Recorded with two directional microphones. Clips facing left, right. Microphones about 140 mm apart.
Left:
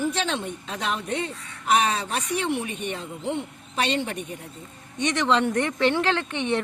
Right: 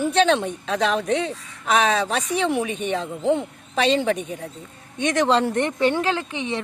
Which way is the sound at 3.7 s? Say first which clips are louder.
Right 6 dB; 90° right.